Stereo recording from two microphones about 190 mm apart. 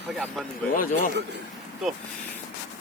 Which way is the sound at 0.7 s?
45° left (ahead or behind).